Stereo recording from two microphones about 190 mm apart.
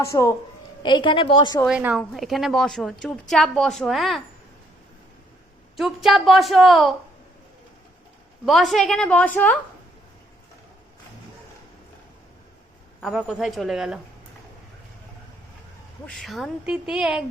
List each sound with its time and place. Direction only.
0.0 s a woman's voice: 15° left (ahead or behind)
1.6 s a woman's voice: 5° right (ahead or behind)
5.7 s a woman's voice: centre (ahead or behind)
8.4 s a woman's voice: centre (ahead or behind)
13.0 s a woman's voice: centre (ahead or behind)
16.0 s a woman's voice: centre (ahead or behind)